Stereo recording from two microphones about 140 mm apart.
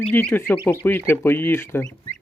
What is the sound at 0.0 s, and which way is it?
Speech, 10° left (ahead or behind).